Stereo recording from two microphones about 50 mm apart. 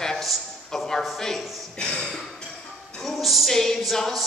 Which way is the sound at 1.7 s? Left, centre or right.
Left.